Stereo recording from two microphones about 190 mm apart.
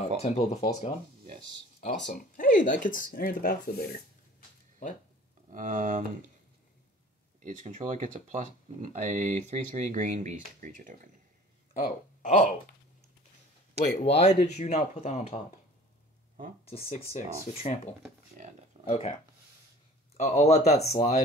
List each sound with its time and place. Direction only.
0.2 s speech: 35° left (ahead or behind)
1.8 s speech: 40° left (ahead or behind)
5.5 s speech: 40° right (ahead or behind)
7.4 s speech: 40° right (ahead or behind)
11.7 s speech: 40° left (ahead or behind)
13.9 s speech: 35° left (ahead or behind)
16.6 s speech: 30° left (ahead or behind)
18.9 s speech: 30° left (ahead or behind)
20.2 s speech: 35° left (ahead or behind)